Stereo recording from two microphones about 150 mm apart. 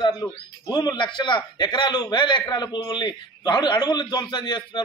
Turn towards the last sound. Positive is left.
turn(degrees=30)  # may be behind; listen again after turning